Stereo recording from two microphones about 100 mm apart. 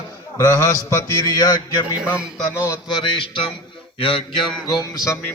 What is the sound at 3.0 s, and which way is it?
Mantra, 60° left (ahead or behind).